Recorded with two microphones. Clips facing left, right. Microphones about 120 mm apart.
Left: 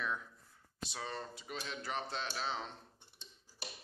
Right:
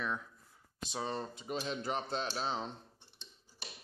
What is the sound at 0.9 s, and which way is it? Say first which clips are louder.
Speech: right 6 dB; 25° right (ahead or behind).